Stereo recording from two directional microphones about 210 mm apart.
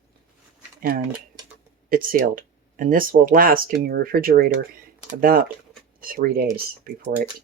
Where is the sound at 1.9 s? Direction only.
40° right (ahead or behind).